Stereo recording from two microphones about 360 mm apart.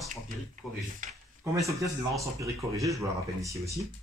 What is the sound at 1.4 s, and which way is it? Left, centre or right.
Speech, centre.